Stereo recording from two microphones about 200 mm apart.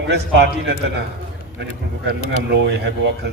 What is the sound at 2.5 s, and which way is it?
Speech, 60° right (ahead or behind).